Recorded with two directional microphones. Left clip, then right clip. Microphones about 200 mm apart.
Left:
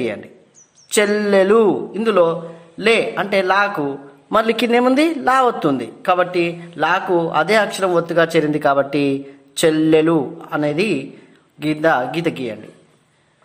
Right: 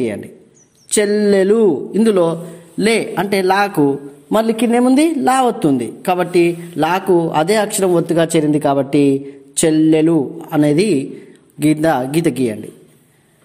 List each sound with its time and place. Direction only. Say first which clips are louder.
0.0 s a man's voice: right 2 dB; 25° right (ahead or behind)
4.6 s speech: even; 5° left (ahead or behind)
4.9 s a woman's voice: right 2 dB; 25° right (ahead or behind)